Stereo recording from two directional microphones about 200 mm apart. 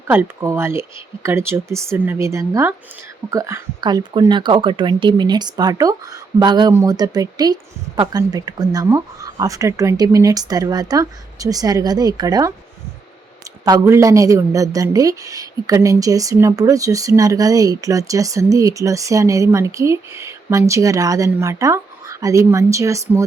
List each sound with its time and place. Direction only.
0.1 s a woman's voice: 10° right (ahead or behind)
13.7 s a woman's voice: 15° right (ahead or behind)